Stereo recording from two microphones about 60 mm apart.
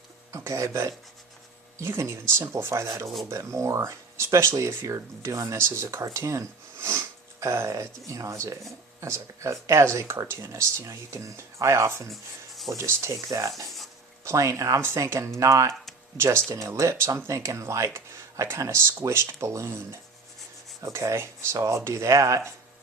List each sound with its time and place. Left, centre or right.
0.3 s speech: right
4.9 s speech: right
5.7 s speech: right
13.2 s speech: right
14.3 s speech: right
16.1 s speech: right
20.8 s speech: right